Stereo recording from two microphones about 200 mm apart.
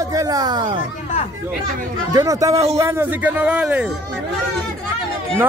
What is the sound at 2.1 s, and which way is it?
Speech, 15° right (ahead or behind).